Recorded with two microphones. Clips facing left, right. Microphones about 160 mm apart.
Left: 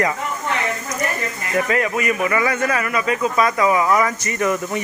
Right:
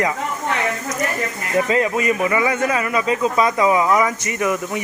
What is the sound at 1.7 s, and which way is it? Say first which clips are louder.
A man's voice: right 2 dB; 25° right (ahead or behind).